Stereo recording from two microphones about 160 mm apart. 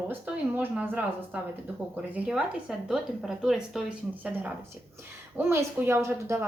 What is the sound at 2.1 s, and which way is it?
A woman's voice, 10° right (ahead or behind).